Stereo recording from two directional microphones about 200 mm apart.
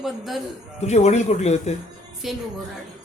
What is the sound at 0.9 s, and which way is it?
Speech, 35° left (ahead or behind).